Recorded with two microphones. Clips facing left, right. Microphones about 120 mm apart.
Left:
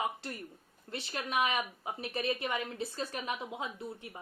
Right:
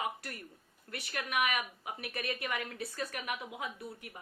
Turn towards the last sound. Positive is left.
turn(degrees=25)  # may be behind; listen again after turning